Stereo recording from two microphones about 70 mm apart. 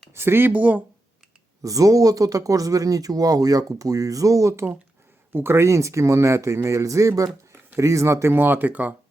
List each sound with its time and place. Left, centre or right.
0.1 s speech: right
0.5 s speech: right
1.6 s speech: right